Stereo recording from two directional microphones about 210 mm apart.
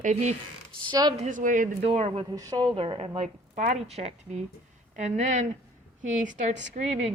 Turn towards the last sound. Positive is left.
turn(degrees=-35)  # may be behind; listen again after turning